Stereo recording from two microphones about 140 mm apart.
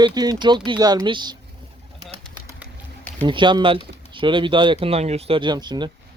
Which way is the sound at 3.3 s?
35° right (ahead or behind).